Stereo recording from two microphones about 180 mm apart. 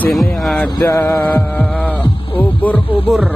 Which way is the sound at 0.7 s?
15° left (ahead or behind).